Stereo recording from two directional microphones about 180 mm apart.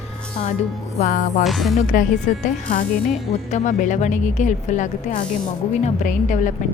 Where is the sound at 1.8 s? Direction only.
45° left (ahead or behind).